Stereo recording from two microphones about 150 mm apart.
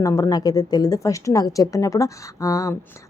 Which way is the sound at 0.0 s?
20° left (ahead or behind).